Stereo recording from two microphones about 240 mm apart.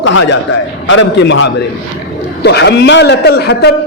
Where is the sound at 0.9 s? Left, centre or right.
Left.